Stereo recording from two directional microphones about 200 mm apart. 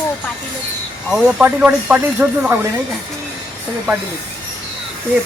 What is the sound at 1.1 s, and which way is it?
Speech, 5° right (ahead or behind).